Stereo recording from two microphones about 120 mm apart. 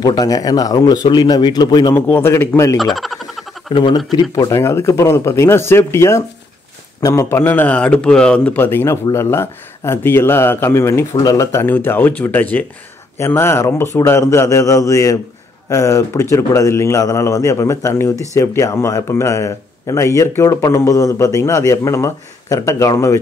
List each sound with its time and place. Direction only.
0.0 s speech: 35° left (ahead or behind)
2.0 s speech: 15° left (ahead or behind)
2.8 s a sound: centre (ahead or behind)
3.7 s speech: 45° left (ahead or behind)
4.4 s a man's voice: 25° left (ahead or behind)
7.2 s speech: 15° left (ahead or behind)
8.5 s speech: 20° left (ahead or behind)